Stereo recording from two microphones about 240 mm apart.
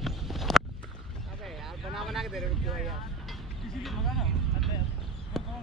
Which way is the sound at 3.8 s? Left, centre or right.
Centre.